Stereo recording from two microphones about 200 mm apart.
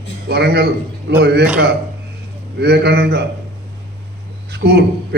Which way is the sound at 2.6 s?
55° right (ahead or behind).